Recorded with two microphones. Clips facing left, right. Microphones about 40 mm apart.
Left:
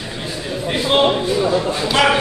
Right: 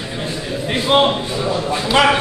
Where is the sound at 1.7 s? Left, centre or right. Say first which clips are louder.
Right 5 dB; centre.